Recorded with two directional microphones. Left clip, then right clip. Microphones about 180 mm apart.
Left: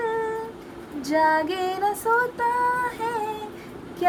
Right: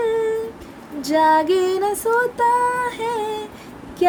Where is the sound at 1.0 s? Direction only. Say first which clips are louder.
Right 5 dB; 40° right (ahead or behind).